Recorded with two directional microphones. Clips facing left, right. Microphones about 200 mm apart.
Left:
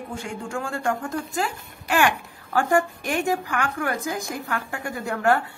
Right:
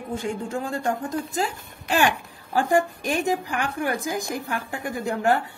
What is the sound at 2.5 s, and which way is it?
Speech, 15° right (ahead or behind).